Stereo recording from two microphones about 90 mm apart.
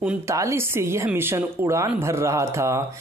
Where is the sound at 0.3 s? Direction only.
35° right (ahead or behind).